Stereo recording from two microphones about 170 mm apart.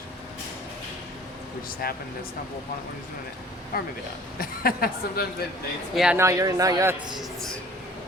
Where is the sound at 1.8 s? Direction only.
60° left (ahead or behind).